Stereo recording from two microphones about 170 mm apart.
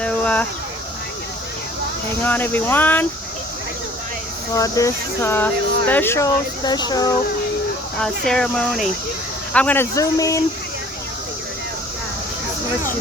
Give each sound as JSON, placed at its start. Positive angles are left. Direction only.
{"t": 0.0, "sound": "a sound", "side_deg": 10}
{"t": 2.2, "sound": "speech", "side_deg": 10}
{"t": 4.5, "sound": "speech", "side_deg": 20}
{"t": 8.0, "sound": "speech", "side_deg": 5}